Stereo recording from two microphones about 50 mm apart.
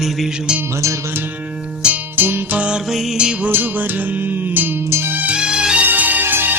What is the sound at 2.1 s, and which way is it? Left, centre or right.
Music, right.